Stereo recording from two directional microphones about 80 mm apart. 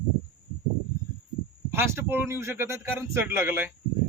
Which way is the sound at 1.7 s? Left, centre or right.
Right.